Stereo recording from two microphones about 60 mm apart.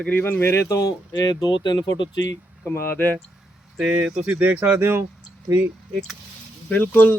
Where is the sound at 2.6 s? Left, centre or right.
Left.